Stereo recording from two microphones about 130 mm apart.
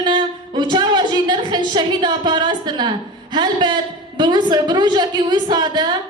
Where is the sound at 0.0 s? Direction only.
35° right (ahead or behind).